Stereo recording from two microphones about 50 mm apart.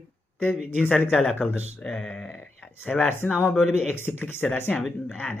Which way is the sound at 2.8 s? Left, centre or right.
Left.